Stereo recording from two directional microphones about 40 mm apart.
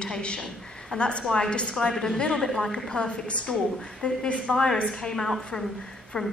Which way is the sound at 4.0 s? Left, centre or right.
Centre.